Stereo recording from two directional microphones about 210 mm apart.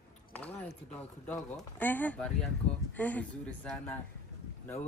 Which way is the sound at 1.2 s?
10° left (ahead or behind).